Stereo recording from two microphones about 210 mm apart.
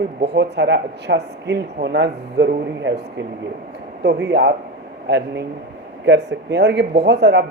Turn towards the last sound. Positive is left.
turn(degrees=-55)  # may be behind; listen again after turning